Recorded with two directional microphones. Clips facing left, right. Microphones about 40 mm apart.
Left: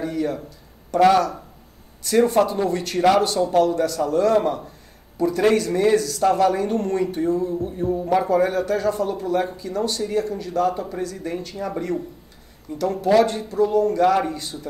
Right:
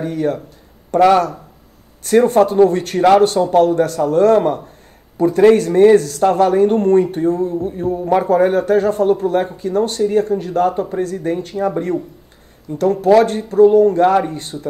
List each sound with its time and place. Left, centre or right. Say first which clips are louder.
0.0 s speech: right 5 dB; right
12.7 s speech: right 6 dB; right